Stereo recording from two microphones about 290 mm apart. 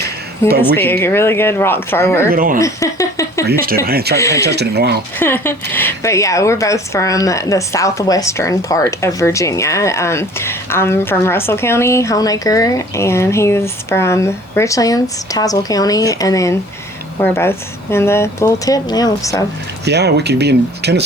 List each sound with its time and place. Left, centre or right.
0.6 s a woman's voice: centre
2.3 s speech: right
2.6 s a woman's voice: centre
3.8 s speech: right
4.2 s a woman's voice: centre
4.4 s speech: right
5.2 s a woman's voice: centre
19.8 s speech: right